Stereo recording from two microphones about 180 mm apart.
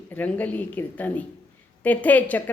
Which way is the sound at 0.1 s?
10° left (ahead or behind).